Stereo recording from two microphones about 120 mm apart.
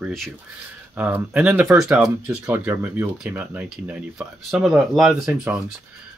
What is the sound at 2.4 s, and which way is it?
Speech, 20° right (ahead or behind).